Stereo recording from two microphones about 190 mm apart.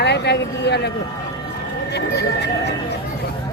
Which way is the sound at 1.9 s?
60° left (ahead or behind).